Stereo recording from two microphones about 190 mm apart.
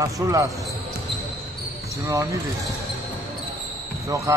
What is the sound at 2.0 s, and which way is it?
Speech, 15° right (ahead or behind).